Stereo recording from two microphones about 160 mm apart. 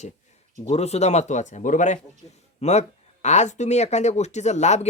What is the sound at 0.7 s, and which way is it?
Speech, 40° left (ahead or behind).